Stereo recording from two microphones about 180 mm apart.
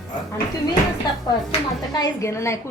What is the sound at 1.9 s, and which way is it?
Speech, 20° left (ahead or behind).